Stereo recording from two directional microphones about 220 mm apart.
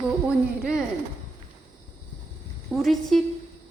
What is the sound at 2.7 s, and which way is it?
Speech, centre (ahead or behind).